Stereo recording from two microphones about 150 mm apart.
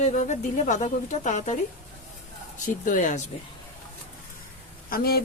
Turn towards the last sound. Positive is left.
turn(degrees=90)